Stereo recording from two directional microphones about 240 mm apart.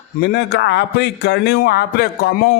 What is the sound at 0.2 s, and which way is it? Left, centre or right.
A man's voice, left.